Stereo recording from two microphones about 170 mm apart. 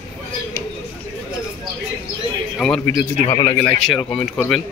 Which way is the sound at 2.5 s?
5° left (ahead or behind).